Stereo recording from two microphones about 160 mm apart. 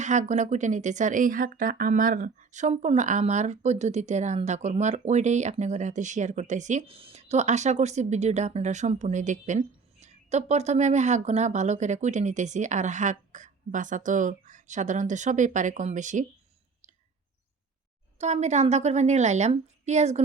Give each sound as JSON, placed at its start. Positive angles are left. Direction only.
{"t": 0.0, "sound": "speech", "side_deg": -50}
{"t": 18.2, "sound": "speech", "side_deg": -45}